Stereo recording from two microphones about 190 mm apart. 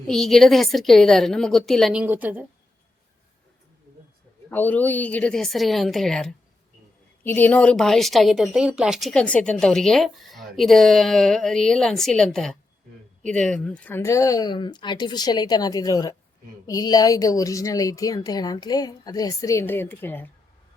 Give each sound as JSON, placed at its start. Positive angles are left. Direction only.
{"t": 0.1, "sound": "speech", "side_deg": 0}
{"t": 4.4, "sound": "a woman's voice", "side_deg": 10}